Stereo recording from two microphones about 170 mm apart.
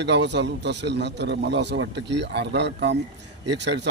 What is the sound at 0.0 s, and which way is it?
A man's voice, 90° right.